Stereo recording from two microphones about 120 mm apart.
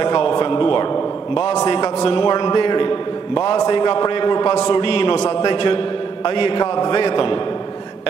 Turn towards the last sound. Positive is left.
turn(degrees=40)  # may be behind; listen again after turning